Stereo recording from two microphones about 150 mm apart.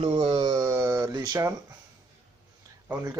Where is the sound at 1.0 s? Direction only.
25° right (ahead or behind).